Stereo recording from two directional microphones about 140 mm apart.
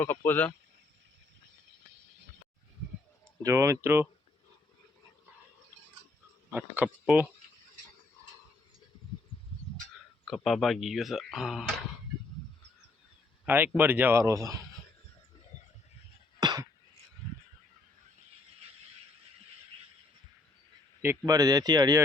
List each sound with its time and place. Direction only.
0.0 s speech: 15° left (ahead or behind)
3.4 s speech: 20° right (ahead or behind)
6.5 s speech: 10° right (ahead or behind)
10.2 s speech: centre (ahead or behind)
13.4 s speech: 15° right (ahead or behind)
16.4 s a sound: 30° right (ahead or behind)
21.2 s speech: 25° right (ahead or behind)